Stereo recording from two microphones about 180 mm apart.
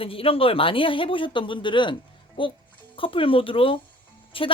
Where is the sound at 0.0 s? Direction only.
30° left (ahead or behind).